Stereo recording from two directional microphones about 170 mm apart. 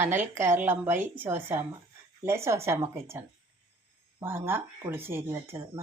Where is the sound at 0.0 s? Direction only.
15° right (ahead or behind).